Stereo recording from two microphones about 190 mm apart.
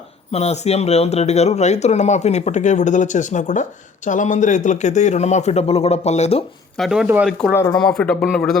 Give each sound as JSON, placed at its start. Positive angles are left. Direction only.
{"t": 0.3, "sound": "speech", "side_deg": 35}
{"t": 6.7, "sound": "speech", "side_deg": 0}
{"t": 7.5, "sound": "speech", "side_deg": 20}
{"t": 7.8, "sound": "speech", "side_deg": 5}